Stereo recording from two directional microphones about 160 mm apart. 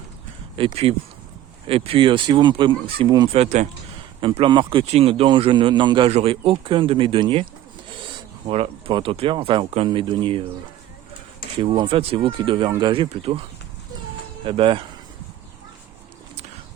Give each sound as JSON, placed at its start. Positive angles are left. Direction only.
{"t": 0.5, "sound": "speech", "side_deg": -35}
{"t": 3.3, "sound": "speech", "side_deg": -45}
{"t": 4.2, "sound": "speech", "side_deg": -35}
{"t": 11.5, "sound": "speech", "side_deg": -30}
{"t": 14.4, "sound": "speech", "side_deg": -35}